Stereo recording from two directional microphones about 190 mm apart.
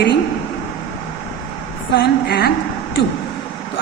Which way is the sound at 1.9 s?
55° left (ahead or behind).